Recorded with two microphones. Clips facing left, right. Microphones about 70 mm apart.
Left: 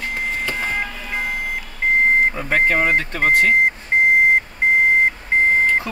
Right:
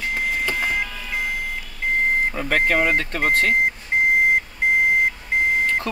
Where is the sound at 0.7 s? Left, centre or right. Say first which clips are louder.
Left 1 dB; left.